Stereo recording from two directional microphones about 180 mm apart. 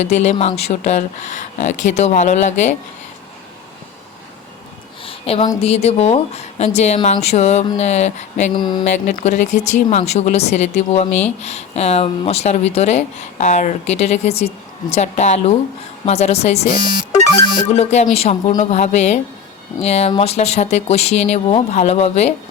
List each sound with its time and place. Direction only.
0.0 s speech: 40° left (ahead or behind)
5.0 s a sound: 30° left (ahead or behind)
5.5 s speech: 35° left (ahead or behind)
8.5 s mantra: 25° left (ahead or behind)
8.8 s speech: 45° left (ahead or behind)